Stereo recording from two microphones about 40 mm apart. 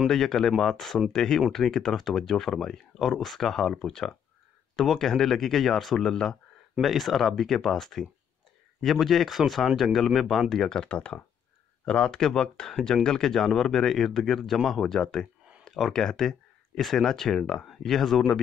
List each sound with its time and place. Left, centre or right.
0.1 s speech: centre
4.7 s speech: centre
10.5 s speech: centre
17.6 s speech: centre